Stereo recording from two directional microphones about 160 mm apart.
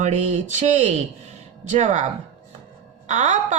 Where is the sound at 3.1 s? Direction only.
50° right (ahead or behind).